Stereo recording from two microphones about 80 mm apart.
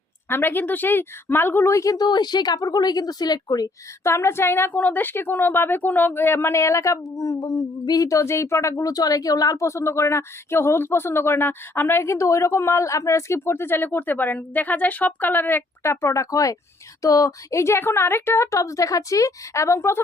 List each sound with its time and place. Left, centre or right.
0.3 s a woman's voice: left
2.0 s speech: left
4.0 s a woman's voice: left